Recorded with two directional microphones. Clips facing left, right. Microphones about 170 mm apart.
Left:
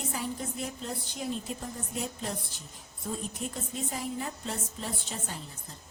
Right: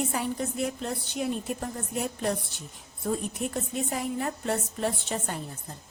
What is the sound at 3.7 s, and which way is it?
A woman's voice, 65° right (ahead or behind).